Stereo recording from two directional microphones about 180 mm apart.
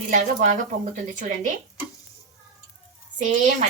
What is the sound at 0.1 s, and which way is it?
Speech, 45° right (ahead or behind).